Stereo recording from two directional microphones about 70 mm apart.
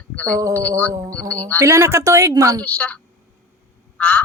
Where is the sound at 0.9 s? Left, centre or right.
Right.